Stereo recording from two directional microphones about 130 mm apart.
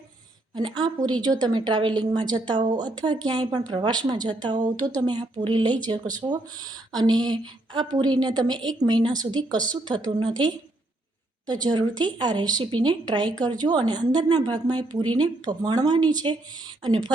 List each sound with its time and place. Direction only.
0.5 s a woman's voice: 35° right (ahead or behind)